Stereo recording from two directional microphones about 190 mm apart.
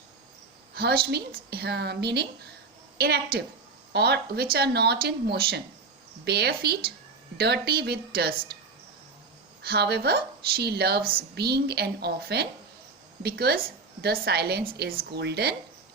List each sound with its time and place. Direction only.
0.8 s speech: 55° right (ahead or behind)
9.6 s speech: 55° right (ahead or behind)